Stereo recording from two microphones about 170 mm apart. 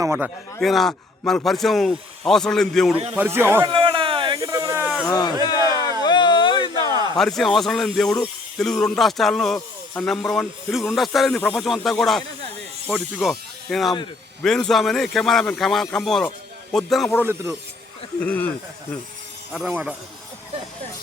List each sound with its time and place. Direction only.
0.0 s speech: 10° right (ahead or behind)
0.6 s a man's voice: centre (ahead or behind)
3.2 s speech: 15° right (ahead or behind)
3.6 s a sound: 30° right (ahead or behind)
4.8 s a sound: 10° right (ahead or behind)
5.0 s a sound: 25° left (ahead or behind)
7.2 s speech: centre (ahead or behind)
17.2 s speech: 15° right (ahead or behind)
18.2 s speech: 10° left (ahead or behind)
19.5 s speech: 5° right (ahead or behind)